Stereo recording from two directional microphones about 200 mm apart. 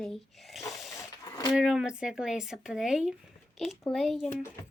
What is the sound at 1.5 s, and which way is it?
Speech, 5° right (ahead or behind).